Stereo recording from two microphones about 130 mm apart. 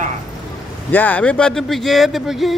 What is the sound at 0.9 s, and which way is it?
Speech, 15° left (ahead or behind).